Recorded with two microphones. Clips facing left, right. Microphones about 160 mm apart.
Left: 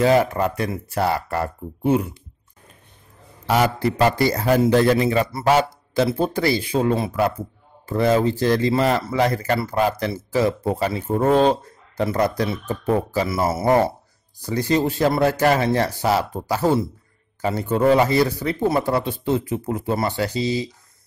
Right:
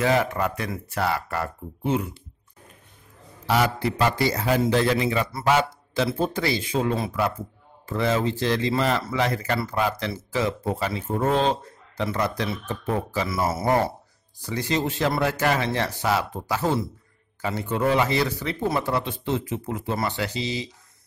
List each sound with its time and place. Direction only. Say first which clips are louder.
0.0 s a man's voice: left 5 dB; 35° left (ahead or behind)
3.4 s a man's voice: left 3 dB; 45° left (ahead or behind); by 13.7 s 30° left (ahead or behind)
14.4 s a man's voice: left 5 dB; 40° left (ahead or behind)